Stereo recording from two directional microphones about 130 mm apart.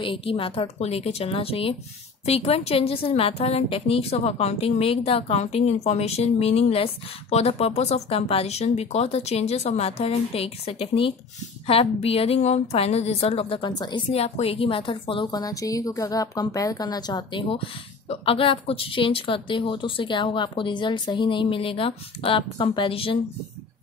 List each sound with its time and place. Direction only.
0.0 s a woman's voice: 45° left (ahead or behind)
14.1 s a woman's voice: 50° left (ahead or behind)